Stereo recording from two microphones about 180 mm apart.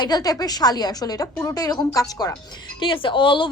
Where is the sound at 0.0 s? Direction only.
20° left (ahead or behind).